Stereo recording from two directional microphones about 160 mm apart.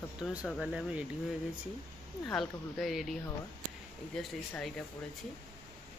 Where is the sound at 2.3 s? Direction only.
Centre (ahead or behind).